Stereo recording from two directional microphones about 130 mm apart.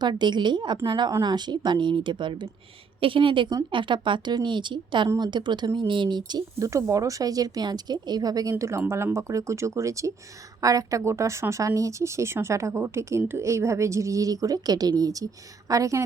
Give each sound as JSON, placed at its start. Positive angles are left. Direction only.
{"t": 0.0, "sound": "a woman's voice", "side_deg": -35}
{"t": 5.0, "sound": "speech", "side_deg": -25}
{"t": 5.3, "sound": "a woman's voice", "side_deg": -35}